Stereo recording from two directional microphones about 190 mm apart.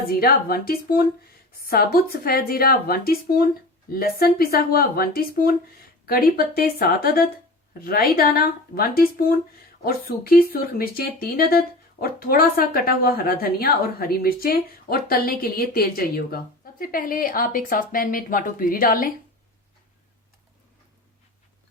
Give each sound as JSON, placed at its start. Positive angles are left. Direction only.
{"t": 0.1, "sound": "speech", "side_deg": 50}